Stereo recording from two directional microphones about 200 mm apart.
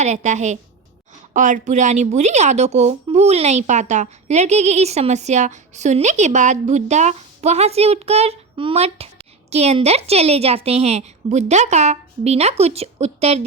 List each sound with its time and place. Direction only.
0.0 s speech: 35° right (ahead or behind)